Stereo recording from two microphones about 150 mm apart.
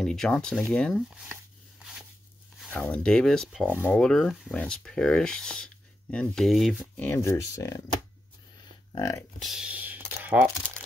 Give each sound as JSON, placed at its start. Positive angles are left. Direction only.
{"t": 0.0, "sound": "speech", "side_deg": 5}
{"t": 1.1, "sound": "chopping", "side_deg": -5}
{"t": 2.7, "sound": "speech", "side_deg": 10}
{"t": 7.0, "sound": "speech", "side_deg": 15}
{"t": 8.9, "sound": "speech", "side_deg": 20}
{"t": 9.4, "sound": "speech", "side_deg": -5}